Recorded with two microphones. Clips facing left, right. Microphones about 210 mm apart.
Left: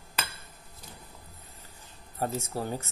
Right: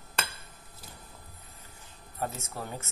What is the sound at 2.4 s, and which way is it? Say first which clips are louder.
Speech: left 6 dB; 30° left (ahead or behind).